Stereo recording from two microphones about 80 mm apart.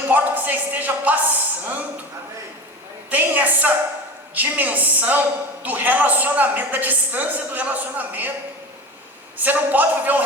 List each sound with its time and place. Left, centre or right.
0.1 s a sound: right
3.1 s a woman's voice: right
9.4 s a woman's voice: right